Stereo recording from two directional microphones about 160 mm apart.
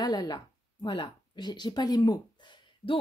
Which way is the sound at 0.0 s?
25° left (ahead or behind).